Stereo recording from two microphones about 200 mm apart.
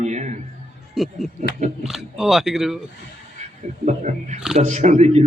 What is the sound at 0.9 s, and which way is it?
Speech, centre (ahead or behind).